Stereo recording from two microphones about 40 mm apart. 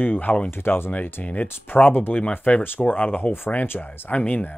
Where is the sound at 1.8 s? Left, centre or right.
Left.